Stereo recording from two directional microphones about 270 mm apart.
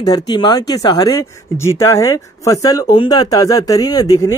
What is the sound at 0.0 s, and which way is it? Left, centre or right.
Speech, centre.